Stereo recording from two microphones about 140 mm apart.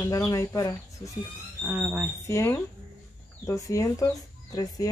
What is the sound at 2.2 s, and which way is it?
Speech, 20° left (ahead or behind).